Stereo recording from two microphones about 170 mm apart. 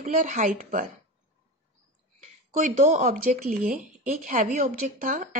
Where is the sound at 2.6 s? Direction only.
45° right (ahead or behind).